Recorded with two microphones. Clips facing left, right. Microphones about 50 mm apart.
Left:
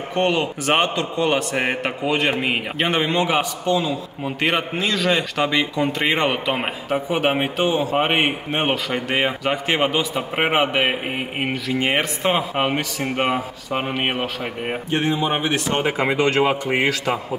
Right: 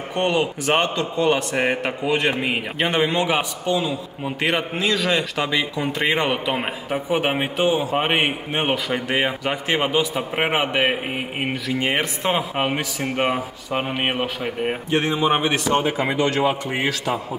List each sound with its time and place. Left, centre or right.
0.1 s a man's voice: centre
2.0 s a man's voice: centre
16.1 s speech: left